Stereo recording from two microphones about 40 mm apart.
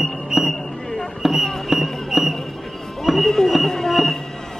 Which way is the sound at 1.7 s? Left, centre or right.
Centre.